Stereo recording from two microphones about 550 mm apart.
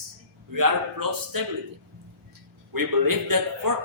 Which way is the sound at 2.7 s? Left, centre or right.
Right.